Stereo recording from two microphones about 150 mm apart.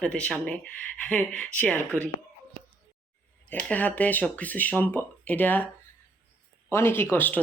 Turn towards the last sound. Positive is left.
turn(degrees=10)  # may be behind; listen again after turning